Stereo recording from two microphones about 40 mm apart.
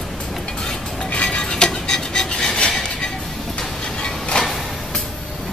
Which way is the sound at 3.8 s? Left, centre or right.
Left.